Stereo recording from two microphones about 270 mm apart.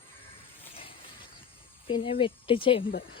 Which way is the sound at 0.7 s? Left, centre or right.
Centre.